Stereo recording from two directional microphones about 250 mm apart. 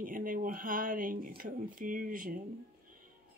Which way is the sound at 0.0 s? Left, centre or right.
Right.